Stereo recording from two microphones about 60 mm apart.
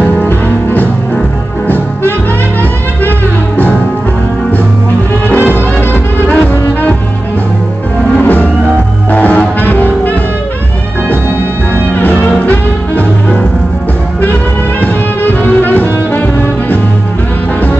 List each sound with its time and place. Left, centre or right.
0.3 s music: left
5.3 s music: left
8.2 s music: left
11.9 s music: left
14.8 s music: left